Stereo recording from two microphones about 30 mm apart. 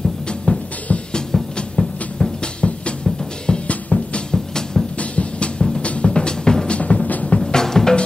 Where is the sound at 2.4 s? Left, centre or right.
Left.